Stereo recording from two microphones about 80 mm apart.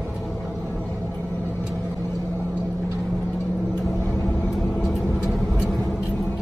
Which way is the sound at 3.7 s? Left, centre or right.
Centre.